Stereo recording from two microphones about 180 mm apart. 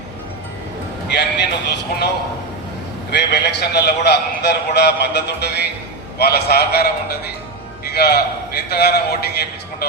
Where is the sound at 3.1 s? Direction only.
70° left (ahead or behind).